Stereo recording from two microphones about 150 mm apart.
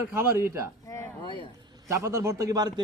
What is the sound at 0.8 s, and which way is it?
Speech, 20° left (ahead or behind).